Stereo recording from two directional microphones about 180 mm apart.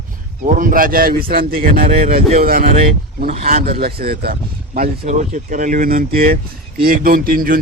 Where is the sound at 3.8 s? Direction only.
60° right (ahead or behind).